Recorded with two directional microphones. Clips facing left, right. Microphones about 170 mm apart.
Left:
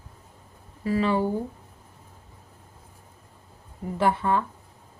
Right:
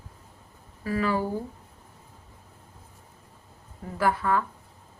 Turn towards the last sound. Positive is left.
turn(degrees=25)  # may be behind; listen again after turning